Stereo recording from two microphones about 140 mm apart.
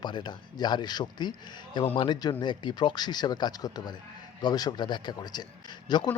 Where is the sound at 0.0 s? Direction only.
30° left (ahead or behind).